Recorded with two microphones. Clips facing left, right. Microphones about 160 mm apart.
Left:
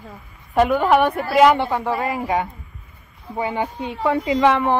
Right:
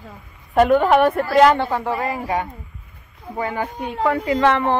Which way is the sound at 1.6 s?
20° left (ahead or behind).